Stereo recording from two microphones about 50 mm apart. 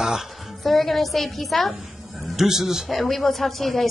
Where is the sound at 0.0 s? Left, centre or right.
Centre.